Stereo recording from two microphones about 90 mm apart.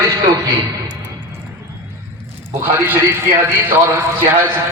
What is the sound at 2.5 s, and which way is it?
A man's voice, 25° right (ahead or behind).